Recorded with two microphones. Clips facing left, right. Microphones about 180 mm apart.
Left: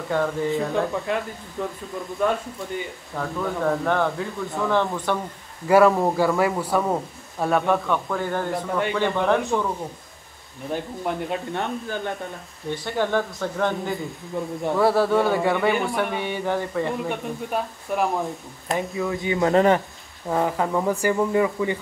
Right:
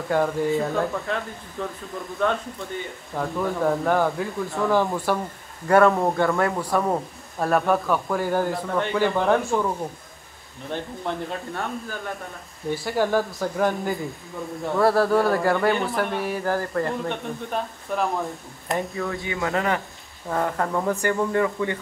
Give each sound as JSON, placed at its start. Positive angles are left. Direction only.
{"t": 0.1, "sound": "speech", "side_deg": -5}
{"t": 0.9, "sound": "speech", "side_deg": 15}
{"t": 3.2, "sound": "speech", "side_deg": -5}
{"t": 8.9, "sound": "speech", "side_deg": -5}
{"t": 10.7, "sound": "speech", "side_deg": 10}
{"t": 11.5, "sound": "speech", "side_deg": 25}
{"t": 12.8, "sound": "speech", "side_deg": -5}
{"t": 19.0, "sound": "speech", "side_deg": 20}
{"t": 19.5, "sound": "speech", "side_deg": 30}
{"t": 20.2, "sound": "speech", "side_deg": 10}